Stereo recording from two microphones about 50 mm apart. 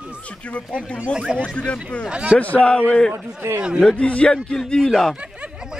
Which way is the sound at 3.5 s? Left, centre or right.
Right.